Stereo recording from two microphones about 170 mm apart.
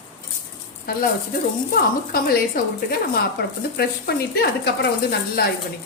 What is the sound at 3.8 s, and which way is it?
Speech, 65° left (ahead or behind).